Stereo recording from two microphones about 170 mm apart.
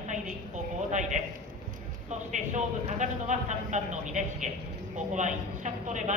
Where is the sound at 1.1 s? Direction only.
50° right (ahead or behind).